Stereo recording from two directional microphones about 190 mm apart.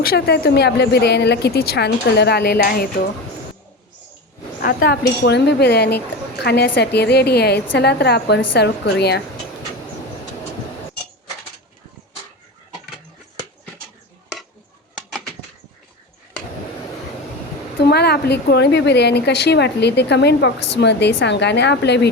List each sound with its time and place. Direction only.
0.0 s a woman's voice: 55° left (ahead or behind)
4.6 s a woman's voice: 55° left (ahead or behind)
14.9 s bird: centre (ahead or behind)
17.8 s a woman's voice: 60° left (ahead or behind)